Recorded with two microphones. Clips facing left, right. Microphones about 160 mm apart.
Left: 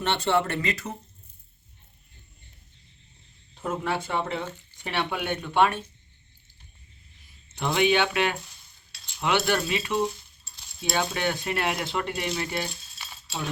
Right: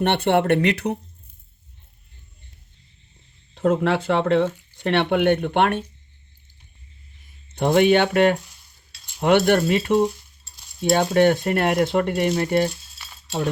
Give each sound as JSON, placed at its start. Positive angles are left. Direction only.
{"t": 0.0, "sound": "speech", "side_deg": -60}
{"t": 3.5, "sound": "speech", "side_deg": -70}
{"t": 7.5, "sound": "speech", "side_deg": -50}